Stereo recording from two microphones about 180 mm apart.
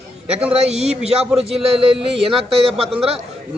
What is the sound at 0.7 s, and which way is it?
Speech, 35° right (ahead or behind).